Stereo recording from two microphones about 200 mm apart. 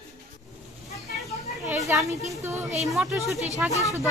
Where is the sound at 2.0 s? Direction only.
15° right (ahead or behind).